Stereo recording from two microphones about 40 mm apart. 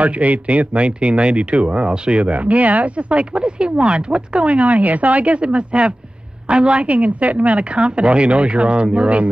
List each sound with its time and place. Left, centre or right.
0.0 s speech: right